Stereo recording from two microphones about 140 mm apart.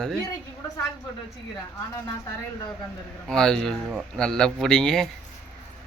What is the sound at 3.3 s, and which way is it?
Speech, 5° left (ahead or behind).